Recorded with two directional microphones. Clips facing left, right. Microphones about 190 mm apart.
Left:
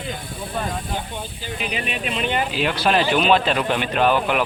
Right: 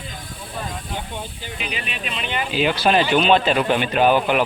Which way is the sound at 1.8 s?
45° left (ahead or behind).